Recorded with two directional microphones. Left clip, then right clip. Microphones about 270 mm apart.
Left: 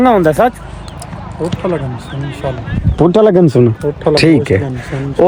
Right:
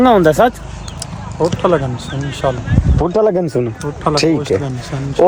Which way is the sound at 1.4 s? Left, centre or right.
Centre.